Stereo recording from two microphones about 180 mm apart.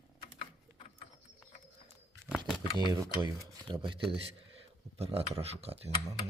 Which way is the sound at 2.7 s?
25° left (ahead or behind).